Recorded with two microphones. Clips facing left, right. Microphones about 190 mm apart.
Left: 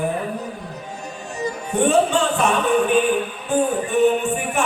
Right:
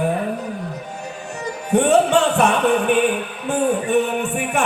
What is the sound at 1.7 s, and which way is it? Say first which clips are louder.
Music: right 3 dB; 65° right (ahead or behind).